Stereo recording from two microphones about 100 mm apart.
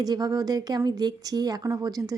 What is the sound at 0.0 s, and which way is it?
A woman's voice, 40° right (ahead or behind).